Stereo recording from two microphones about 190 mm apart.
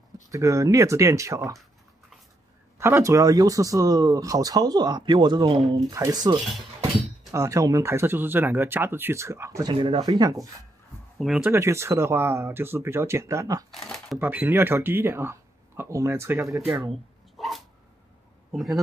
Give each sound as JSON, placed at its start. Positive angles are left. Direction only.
{"t": 0.3, "sound": "speech", "side_deg": -15}
{"t": 2.8, "sound": "speech", "side_deg": -15}
{"t": 11.1, "sound": "speech", "side_deg": -5}
{"t": 13.7, "sound": "speech", "side_deg": 0}
{"t": 14.1, "sound": "speech", "side_deg": -10}
{"t": 17.4, "sound": "dog", "side_deg": 0}
{"t": 18.5, "sound": "speech", "side_deg": 0}